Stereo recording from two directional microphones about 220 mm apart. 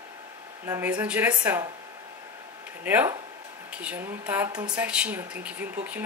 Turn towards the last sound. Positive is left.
turn(degrees=-5)  # may be behind; listen again after turning